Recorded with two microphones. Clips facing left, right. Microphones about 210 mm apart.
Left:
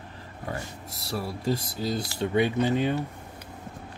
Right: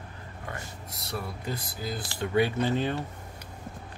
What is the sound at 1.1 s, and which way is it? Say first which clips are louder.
Speech: left 6 dB; 30° left (ahead or behind).